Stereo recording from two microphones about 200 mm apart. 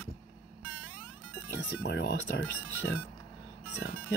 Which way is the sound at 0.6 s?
5° right (ahead or behind).